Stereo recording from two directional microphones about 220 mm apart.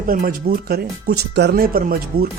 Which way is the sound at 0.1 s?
40° right (ahead or behind).